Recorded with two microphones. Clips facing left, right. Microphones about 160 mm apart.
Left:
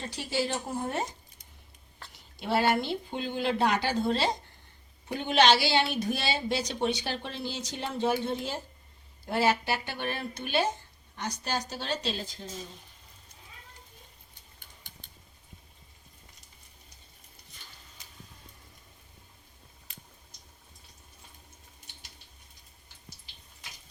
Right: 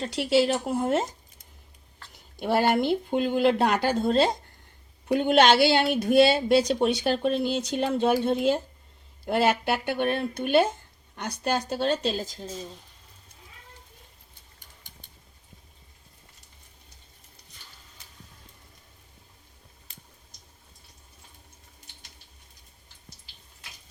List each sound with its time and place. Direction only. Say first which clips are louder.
0.0 s speech: right 9 dB; 85° right
2.3 s a woman's voice: right 3 dB; 50° right (ahead or behind)